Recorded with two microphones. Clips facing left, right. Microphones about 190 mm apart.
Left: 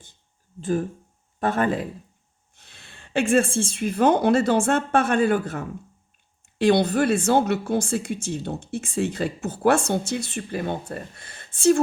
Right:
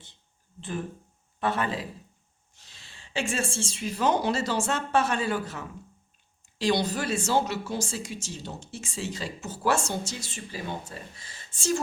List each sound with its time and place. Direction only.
0.6 s speech: 45° left (ahead or behind)